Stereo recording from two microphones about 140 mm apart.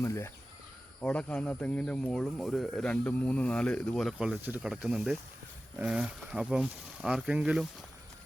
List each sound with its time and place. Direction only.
0.0 s speech: 20° left (ahead or behind)
1.0 s speech: 10° left (ahead or behind); by 4.6 s 15° right (ahead or behind)
4.6 s speech: 5° right (ahead or behind)